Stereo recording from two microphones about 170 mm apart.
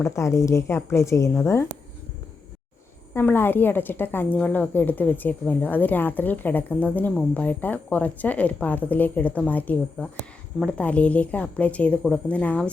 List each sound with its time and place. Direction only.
0.0 s a woman's voice: 15° left (ahead or behind)
3.2 s a woman's voice: 10° left (ahead or behind)